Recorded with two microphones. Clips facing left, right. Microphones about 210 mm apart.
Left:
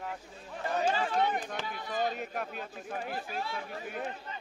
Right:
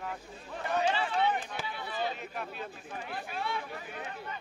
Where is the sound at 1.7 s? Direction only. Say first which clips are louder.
Left 3 dB; 45° left (ahead or behind).